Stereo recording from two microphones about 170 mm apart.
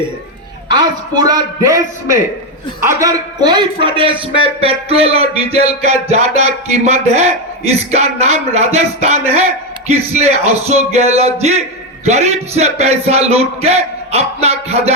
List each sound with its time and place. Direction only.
0.7 s a man's voice: 25° right (ahead or behind)